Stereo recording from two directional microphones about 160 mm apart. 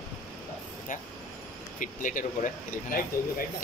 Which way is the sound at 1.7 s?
55° left (ahead or behind).